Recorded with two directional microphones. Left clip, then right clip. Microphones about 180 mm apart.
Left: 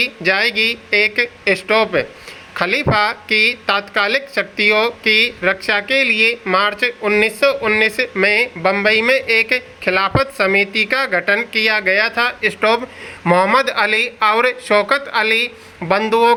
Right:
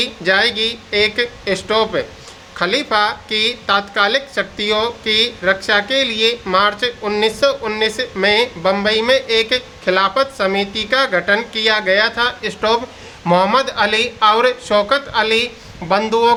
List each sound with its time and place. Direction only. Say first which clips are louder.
0.0 s speech: right 1 dB; 25° left (ahead or behind)